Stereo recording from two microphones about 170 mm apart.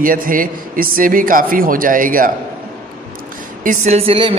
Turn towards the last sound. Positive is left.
turn(degrees=-35)  # may be behind; listen again after turning